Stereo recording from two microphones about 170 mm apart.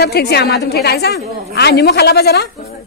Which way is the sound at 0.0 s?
70° left (ahead or behind).